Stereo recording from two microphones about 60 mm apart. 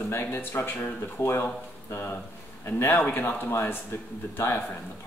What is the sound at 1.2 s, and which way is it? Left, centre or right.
Speech, left.